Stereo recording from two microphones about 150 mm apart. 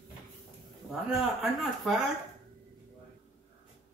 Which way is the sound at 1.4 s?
Centre (ahead or behind).